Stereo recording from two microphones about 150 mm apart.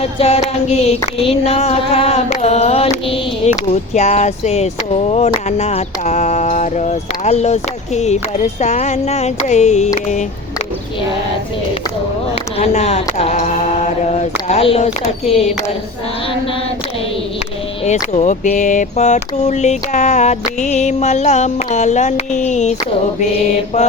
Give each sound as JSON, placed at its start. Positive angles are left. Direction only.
{"t": 0.0, "sound": "speech", "side_deg": 40}
{"t": 12.5, "sound": "speech", "side_deg": 45}
{"t": 18.1, "sound": "speech", "side_deg": 50}